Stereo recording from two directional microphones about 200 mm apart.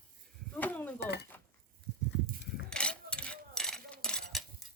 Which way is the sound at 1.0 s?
55° left (ahead or behind).